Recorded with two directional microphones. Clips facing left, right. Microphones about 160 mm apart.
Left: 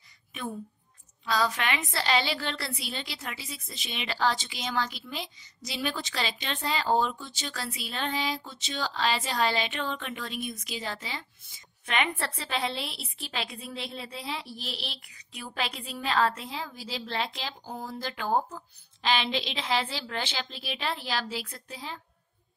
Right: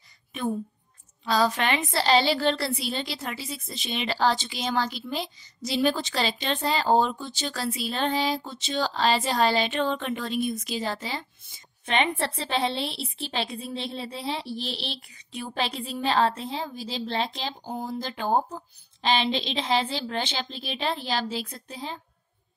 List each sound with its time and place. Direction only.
1.2 s a woman's voice: 30° right (ahead or behind)